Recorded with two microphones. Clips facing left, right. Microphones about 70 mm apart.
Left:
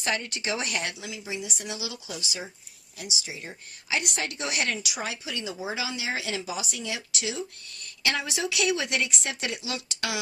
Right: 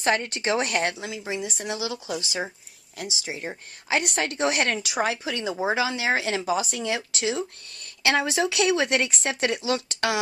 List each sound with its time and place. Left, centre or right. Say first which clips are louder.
0.0 s speech: right 6 dB; right
1.2 s speech: right 4 dB; right